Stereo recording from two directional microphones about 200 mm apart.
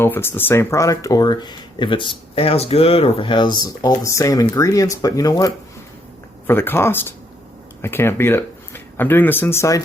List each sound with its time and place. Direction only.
0.0 s speech: 10° left (ahead or behind)
6.5 s speech: 10° left (ahead or behind)